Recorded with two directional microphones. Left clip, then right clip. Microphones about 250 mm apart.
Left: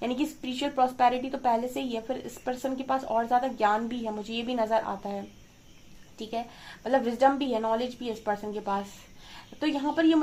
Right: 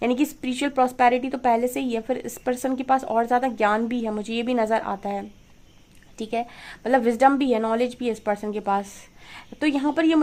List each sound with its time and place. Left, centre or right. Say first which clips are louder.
0.0 s a woman's voice: right 7 dB; right